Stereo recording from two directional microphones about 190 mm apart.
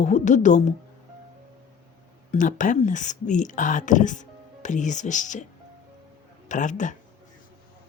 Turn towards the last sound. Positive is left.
turn(degrees=40)  # may be behind; listen again after turning